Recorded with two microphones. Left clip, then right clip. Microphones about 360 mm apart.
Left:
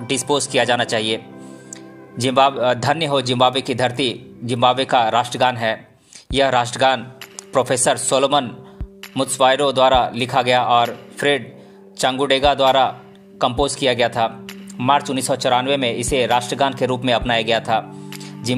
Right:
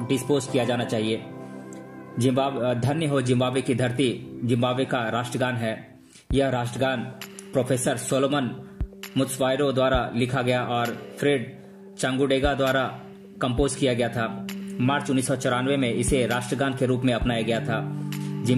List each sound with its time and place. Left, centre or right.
0.5 s a man's voice: centre